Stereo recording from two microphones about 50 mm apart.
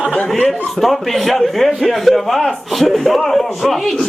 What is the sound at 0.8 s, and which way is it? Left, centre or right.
A man's voice, centre.